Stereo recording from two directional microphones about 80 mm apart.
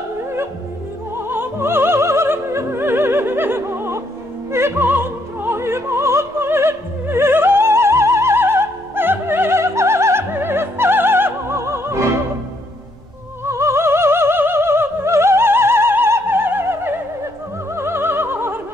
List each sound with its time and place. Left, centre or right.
1.3 s opera: right
13.5 s opera: right